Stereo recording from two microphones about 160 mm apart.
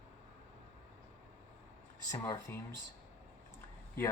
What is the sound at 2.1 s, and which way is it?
Speech, 20° left (ahead or behind).